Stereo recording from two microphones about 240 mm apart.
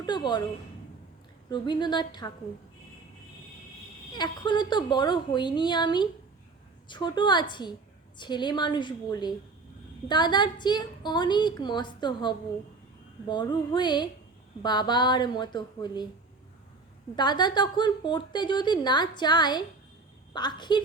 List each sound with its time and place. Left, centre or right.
0.0 s a woman's voice: centre
1.5 s a woman's voice: centre
4.1 s a woman's voice: centre
17.2 s a woman's voice: centre